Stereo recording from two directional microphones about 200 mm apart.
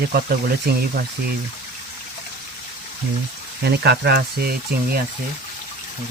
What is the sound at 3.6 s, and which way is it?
Speech, 55° right (ahead or behind).